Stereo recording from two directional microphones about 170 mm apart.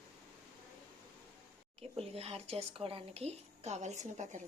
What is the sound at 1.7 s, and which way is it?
Speech, 35° right (ahead or behind).